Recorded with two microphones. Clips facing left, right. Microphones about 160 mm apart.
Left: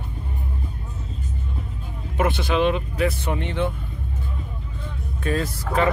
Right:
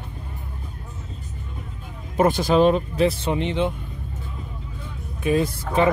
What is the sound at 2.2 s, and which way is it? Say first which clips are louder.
Speech: right 4 dB; 40° right (ahead or behind).